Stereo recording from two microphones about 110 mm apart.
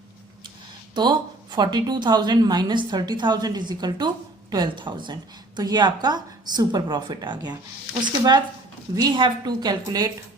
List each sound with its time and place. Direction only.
0.9 s a woman's voice: 40° right (ahead or behind)